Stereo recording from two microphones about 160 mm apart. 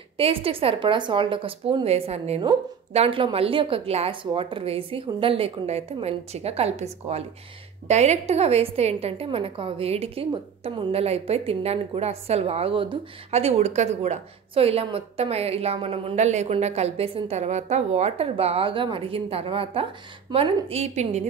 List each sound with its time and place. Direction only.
0.2 s a woman's voice: 35° right (ahead or behind)